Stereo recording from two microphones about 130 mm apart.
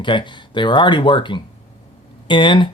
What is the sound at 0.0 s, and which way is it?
Speech, 40° left (ahead or behind).